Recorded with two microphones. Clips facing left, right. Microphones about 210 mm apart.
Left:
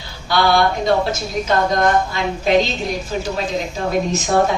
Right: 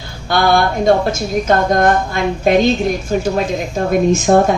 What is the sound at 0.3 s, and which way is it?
A woman's voice, 50° right (ahead or behind).